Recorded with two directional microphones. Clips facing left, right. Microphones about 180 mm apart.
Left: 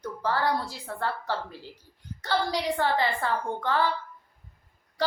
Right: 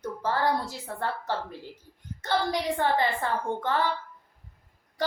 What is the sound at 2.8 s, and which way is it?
A woman's voice, 20° right (ahead or behind).